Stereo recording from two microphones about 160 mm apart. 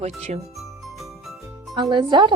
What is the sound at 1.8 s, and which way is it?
Speech, 25° right (ahead or behind).